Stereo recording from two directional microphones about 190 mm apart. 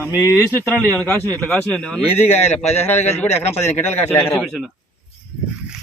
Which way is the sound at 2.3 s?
35° left (ahead or behind).